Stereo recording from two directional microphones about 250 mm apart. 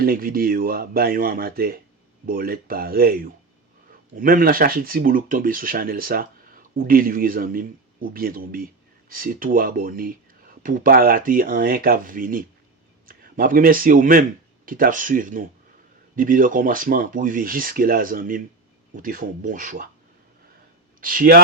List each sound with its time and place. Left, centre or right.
0.0 s speech: right
21.0 s speech: right